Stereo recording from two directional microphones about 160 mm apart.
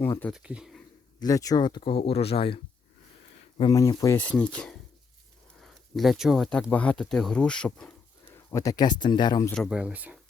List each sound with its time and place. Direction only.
0.0 s speech: 10° left (ahead or behind)
0.3 s speech: 5° right (ahead or behind)
1.2 s speech: 20° left (ahead or behind)
3.7 s speech: 20° left (ahead or behind)
9.6 s speech: 10° right (ahead or behind)